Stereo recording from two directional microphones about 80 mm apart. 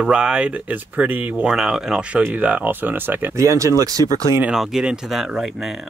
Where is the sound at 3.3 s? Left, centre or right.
Right.